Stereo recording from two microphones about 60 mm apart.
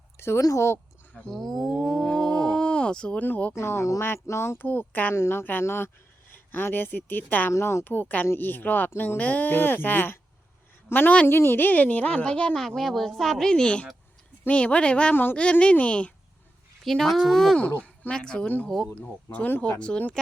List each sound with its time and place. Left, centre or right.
0.2 s speech: left
1.3 s speech: centre
1.8 s a sound: centre
2.0 s a sound: centre
3.2 s a woman's voice: left
3.5 s speech: left
4.5 s a woman's voice: left
5.1 s a woman's voice: left
7.5 s a woman's voice: left; by 15.1 s centre
15.1 s a woman's voice: left
15.4 s a woman's voice: centre
16.8 s speech: centre
18.1 s speech: centre
18.4 s a woman's voice: left